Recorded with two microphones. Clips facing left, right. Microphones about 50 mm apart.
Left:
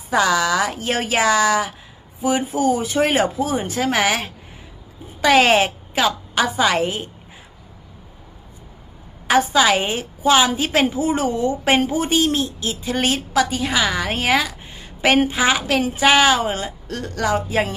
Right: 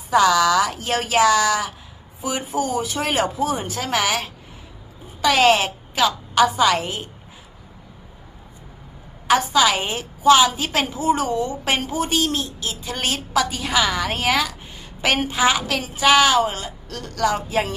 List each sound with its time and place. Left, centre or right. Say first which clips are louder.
0.1 s a woman's voice: right 2 dB; centre
9.2 s a woman's voice: left 1 dB; centre